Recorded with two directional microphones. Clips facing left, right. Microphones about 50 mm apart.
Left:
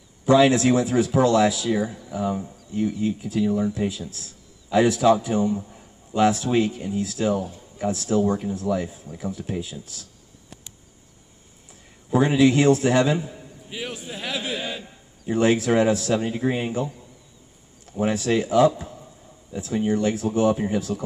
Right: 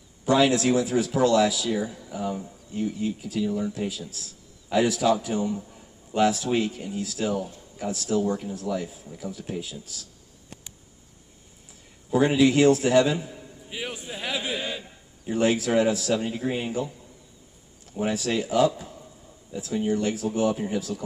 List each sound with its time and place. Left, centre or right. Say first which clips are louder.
0.2 s speech: left 4 dB; left
12.1 s speech: left 2 dB; left
13.7 s a man's voice: left 1 dB; centre
15.2 s speech: left 3 dB; left
17.9 s speech: left 4 dB; left
19.5 s speech: left 2 dB; left